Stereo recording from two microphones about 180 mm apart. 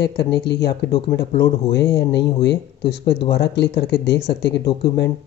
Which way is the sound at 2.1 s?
75° left (ahead or behind).